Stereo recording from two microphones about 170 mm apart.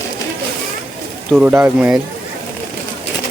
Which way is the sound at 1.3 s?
10° right (ahead or behind).